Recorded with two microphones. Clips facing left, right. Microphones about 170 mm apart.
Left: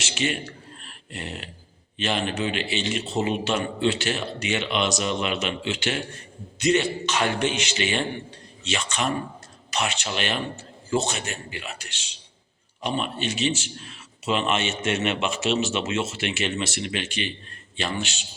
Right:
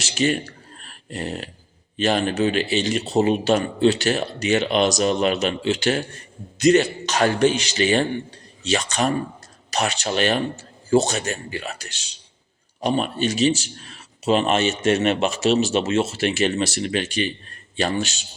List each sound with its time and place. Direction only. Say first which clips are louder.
0.0 s a man's voice: right 6 dB; 40° right (ahead or behind)
0.8 s a sound: right 8 dB; 40° right (ahead or behind)
2.0 s a man's voice: right 6 dB; 40° right (ahead or behind)